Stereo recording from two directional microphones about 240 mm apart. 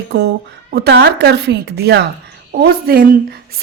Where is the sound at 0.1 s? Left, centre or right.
Right.